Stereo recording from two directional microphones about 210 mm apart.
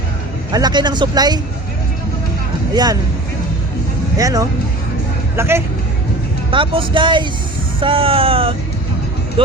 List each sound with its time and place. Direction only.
0.5 s speech: 20° right (ahead or behind)
2.7 s speech: 20° right (ahead or behind)
4.2 s speech: 15° right (ahead or behind)
6.5 s speech: 25° right (ahead or behind)